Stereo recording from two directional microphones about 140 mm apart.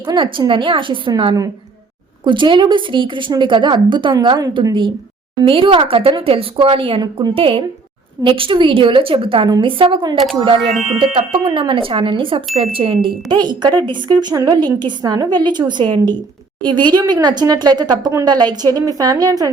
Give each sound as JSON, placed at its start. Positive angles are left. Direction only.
{"t": 0.0, "sound": "speech", "side_deg": -35}